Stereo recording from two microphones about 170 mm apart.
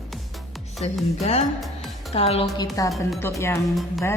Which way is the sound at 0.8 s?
40° left (ahead or behind).